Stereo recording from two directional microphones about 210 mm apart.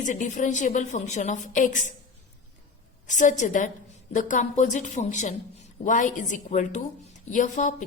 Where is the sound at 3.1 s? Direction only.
35° left (ahead or behind).